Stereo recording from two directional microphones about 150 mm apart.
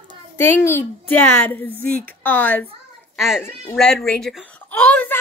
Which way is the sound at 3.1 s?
Centre (ahead or behind).